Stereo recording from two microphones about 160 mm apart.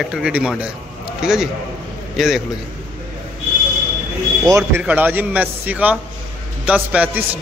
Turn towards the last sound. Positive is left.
turn(degrees=-10)  # may be behind; listen again after turning